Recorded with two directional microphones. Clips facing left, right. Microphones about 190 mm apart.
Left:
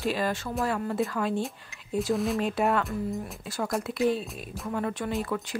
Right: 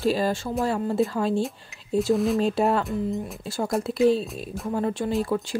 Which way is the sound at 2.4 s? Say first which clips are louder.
Right 4 dB; 30° right (ahead or behind).